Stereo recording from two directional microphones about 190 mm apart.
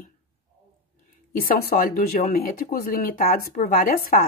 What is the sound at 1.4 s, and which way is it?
Speech, 50° left (ahead or behind).